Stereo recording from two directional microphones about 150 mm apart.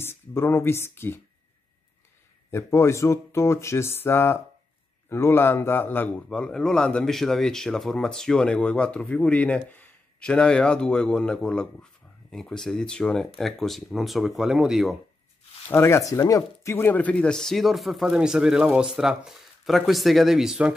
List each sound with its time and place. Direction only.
0.0 s speech: 15° left (ahead or behind)
2.5 s a man's voice: 20° left (ahead or behind); by 15.0 s centre (ahead or behind)
15.7 s a man's voice: 15° left (ahead or behind); by 20.7 s 5° right (ahead or behind)